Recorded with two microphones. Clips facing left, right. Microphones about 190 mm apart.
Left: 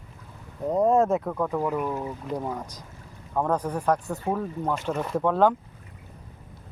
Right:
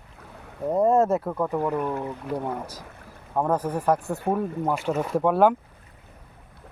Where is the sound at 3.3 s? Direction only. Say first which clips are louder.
Right 1 dB; 10° right (ahead or behind).